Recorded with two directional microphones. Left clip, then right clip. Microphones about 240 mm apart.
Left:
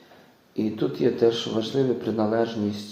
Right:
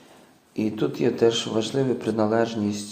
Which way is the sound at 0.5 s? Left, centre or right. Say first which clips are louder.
Right 1 dB; right.